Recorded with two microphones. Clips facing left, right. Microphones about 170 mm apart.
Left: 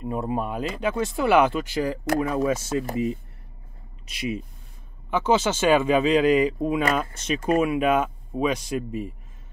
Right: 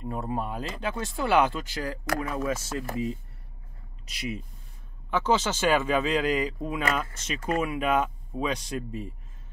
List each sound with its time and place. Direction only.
0.0 s speech: 15° left (ahead or behind)
5.1 s speech: 15° left (ahead or behind)